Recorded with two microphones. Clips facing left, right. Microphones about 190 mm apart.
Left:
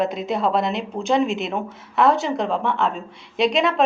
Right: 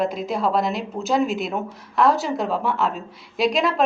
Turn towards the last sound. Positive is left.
turn(degrees=0)  # may be behind; listen again after turning